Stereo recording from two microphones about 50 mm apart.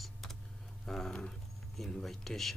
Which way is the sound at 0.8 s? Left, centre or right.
Centre.